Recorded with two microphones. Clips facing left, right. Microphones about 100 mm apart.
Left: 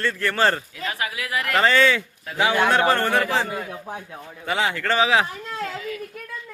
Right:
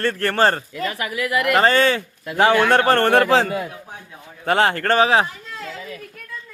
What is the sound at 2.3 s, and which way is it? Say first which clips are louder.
A man's voice: right 4 dB; 65° right (ahead or behind).